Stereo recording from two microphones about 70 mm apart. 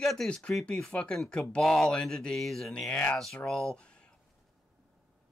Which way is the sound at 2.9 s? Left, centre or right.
Centre.